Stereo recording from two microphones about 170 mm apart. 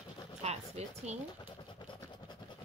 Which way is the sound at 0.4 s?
40° right (ahead or behind).